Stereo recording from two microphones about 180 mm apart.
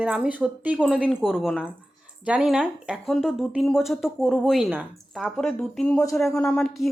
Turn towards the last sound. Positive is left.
turn(degrees=0)  # may be behind; listen again after turning